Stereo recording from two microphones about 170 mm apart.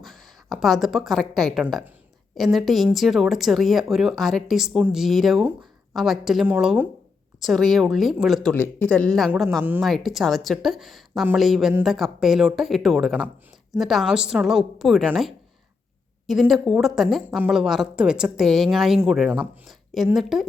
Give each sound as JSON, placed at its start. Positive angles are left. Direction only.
{"t": 0.0, "sound": "a woman's voice", "side_deg": 0}
{"t": 8.5, "sound": "speech", "side_deg": 10}